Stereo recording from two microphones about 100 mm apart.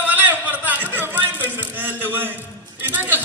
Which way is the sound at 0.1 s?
15° right (ahead or behind).